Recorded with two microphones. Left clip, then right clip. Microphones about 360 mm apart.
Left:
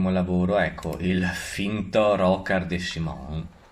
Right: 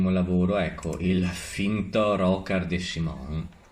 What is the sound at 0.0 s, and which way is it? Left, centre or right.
Speech, left.